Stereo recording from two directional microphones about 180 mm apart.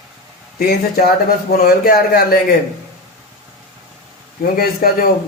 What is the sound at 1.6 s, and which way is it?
Speech, 55° left (ahead or behind).